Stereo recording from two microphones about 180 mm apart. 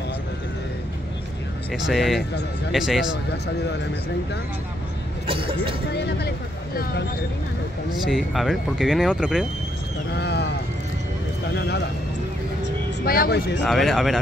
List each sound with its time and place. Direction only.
1.7 s speech: centre (ahead or behind)
5.2 s a sound: 30° right (ahead or behind)
5.9 s speech: 70° left (ahead or behind)
8.0 s speech: centre (ahead or behind)
10.1 s sheep: 70° left (ahead or behind)
11.4 s a sound: 65° left (ahead or behind)
13.0 s speech: 55° left (ahead or behind)
13.7 s speech: centre (ahead or behind)